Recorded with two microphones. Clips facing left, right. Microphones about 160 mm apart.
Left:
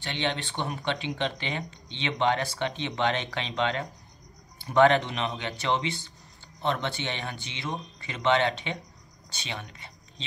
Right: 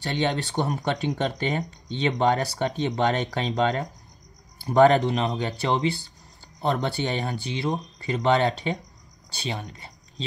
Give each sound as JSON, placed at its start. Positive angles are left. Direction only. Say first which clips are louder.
{"t": 0.0, "sound": "speech", "louder": "right 5 dB", "side_deg": -40}